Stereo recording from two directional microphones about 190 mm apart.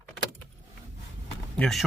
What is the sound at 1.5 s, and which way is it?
Speech, centre (ahead or behind).